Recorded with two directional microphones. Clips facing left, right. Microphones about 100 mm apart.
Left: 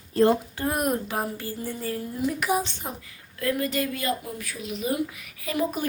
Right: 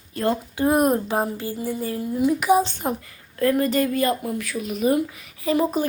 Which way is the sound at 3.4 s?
40° right (ahead or behind).